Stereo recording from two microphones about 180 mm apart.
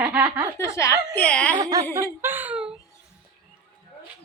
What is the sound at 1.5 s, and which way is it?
Speech, 20° right (ahead or behind).